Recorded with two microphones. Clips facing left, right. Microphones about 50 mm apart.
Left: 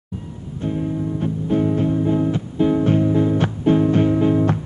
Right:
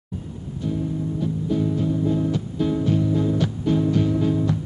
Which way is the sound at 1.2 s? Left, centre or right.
Left.